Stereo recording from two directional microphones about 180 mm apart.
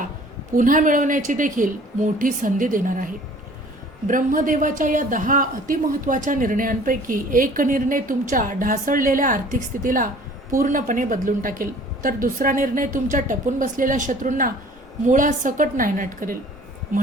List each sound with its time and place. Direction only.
0.5 s speech: 45° right (ahead or behind)